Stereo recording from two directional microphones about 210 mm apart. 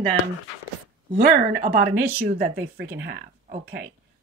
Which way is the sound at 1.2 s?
40° right (ahead or behind).